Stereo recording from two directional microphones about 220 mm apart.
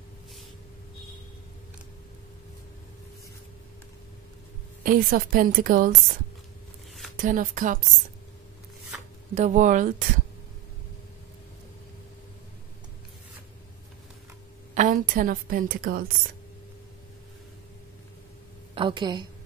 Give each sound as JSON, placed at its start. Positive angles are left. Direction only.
{"t": 4.8, "sound": "a woman's voice", "side_deg": -40}
{"t": 7.2, "sound": "a woman's voice", "side_deg": -35}
{"t": 9.3, "sound": "a woman's voice", "side_deg": -35}
{"t": 14.7, "sound": "a woman's voice", "side_deg": -35}
{"t": 18.8, "sound": "a woman's voice", "side_deg": -20}